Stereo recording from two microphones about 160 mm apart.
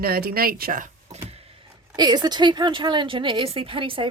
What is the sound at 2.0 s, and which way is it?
A woman's voice, 25° right (ahead or behind).